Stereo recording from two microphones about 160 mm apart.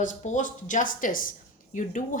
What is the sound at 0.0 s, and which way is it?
A woman's voice, 50° left (ahead or behind).